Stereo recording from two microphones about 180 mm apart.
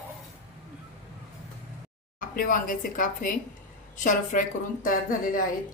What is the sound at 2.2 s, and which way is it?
A woman's voice, 50° left (ahead or behind).